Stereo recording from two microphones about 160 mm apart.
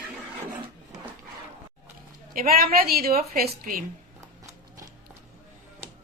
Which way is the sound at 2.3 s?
65° right (ahead or behind).